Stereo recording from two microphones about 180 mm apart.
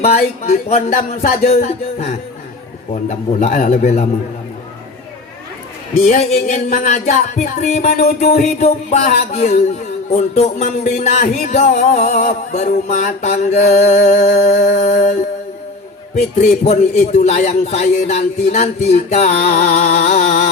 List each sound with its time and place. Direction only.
0.0 s music: 40° left (ahead or behind)
1.5 s a man's voice: 35° left (ahead or behind)
2.9 s music: 45° left (ahead or behind)
5.9 s a man's voice: 35° left (ahead or behind)
8.2 s music: 40° left (ahead or behind)
10.2 s a man's voice: 40° left (ahead or behind)
16.1 s a man's voice: 40° left (ahead or behind)